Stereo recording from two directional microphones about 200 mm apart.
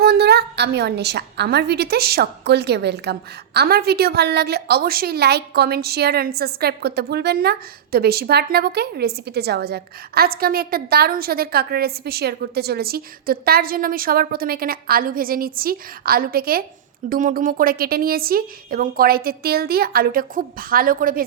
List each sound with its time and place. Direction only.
0.0 s a woman's voice: 55° right (ahead or behind)